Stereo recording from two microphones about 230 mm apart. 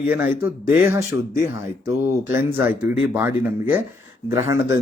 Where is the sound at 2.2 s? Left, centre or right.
Centre.